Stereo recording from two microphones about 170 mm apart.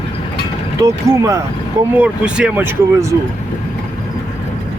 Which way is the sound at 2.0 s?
5° right (ahead or behind).